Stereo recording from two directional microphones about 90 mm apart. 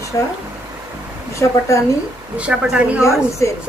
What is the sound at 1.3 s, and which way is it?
Speech, 35° left (ahead or behind).